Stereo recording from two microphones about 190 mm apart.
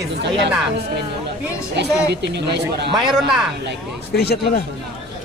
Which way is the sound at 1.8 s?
60° right (ahead or behind).